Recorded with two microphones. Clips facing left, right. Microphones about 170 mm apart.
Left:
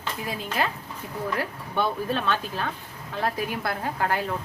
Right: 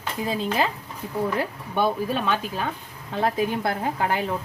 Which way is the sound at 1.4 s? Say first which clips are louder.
Right 3 dB; 15° right (ahead or behind).